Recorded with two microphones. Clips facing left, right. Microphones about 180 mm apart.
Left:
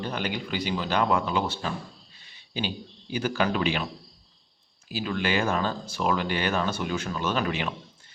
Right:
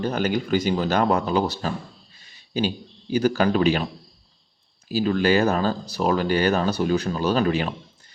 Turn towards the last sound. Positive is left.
turn(degrees=-35)  # may be behind; listen again after turning